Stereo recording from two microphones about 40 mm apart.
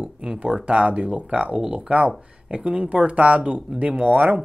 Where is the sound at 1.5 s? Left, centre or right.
Centre.